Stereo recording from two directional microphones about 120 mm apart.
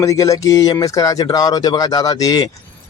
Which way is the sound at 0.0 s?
25° left (ahead or behind).